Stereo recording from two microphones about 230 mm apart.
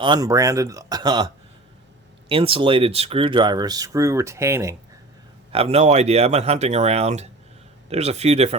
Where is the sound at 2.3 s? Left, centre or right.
Right.